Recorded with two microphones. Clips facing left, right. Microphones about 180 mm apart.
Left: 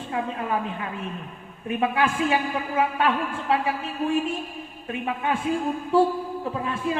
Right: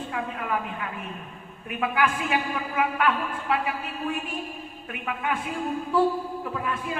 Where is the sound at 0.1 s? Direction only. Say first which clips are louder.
Left 4 dB; 30° left (ahead or behind).